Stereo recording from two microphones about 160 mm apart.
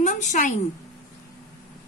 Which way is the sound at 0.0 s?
50° left (ahead or behind).